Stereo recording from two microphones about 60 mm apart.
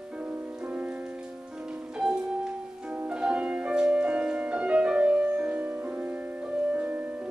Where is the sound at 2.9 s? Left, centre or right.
Centre.